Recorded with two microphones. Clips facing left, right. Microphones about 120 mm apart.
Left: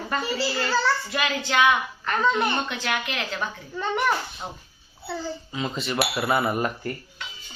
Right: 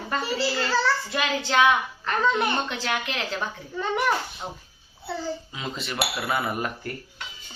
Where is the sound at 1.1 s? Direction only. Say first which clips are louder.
Even; 30° right (ahead or behind).